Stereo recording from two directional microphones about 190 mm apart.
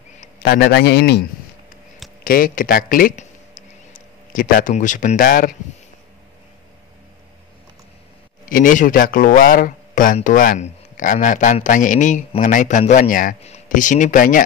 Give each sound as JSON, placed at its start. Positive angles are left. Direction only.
{"t": 0.4, "sound": "a man's voice", "side_deg": 60}
{"t": 8.5, "sound": "speech", "side_deg": 45}